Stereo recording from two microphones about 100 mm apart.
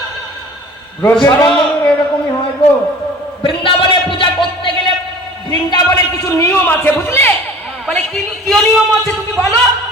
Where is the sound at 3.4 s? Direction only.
55° left (ahead or behind).